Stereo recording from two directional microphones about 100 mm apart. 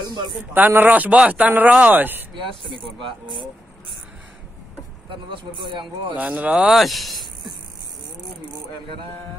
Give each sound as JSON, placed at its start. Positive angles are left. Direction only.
{"t": 0.0, "sound": "a sound", "side_deg": -50}
{"t": 0.5, "sound": "speech", "side_deg": -20}
{"t": 3.0, "sound": "speech", "side_deg": -50}
{"t": 5.1, "sound": "speech", "side_deg": -55}
{"t": 6.1, "sound": "speech", "side_deg": -15}